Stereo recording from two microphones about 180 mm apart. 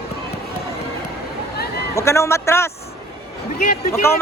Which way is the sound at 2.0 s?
15° left (ahead or behind).